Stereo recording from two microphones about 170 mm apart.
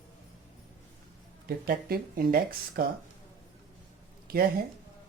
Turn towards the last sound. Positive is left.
turn(degrees=-60)  # may be behind; listen again after turning